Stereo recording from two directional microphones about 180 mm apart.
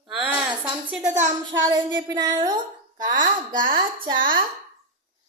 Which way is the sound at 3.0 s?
45° right (ahead or behind).